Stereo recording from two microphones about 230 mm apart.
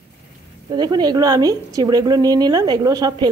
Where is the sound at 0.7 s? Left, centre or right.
Centre.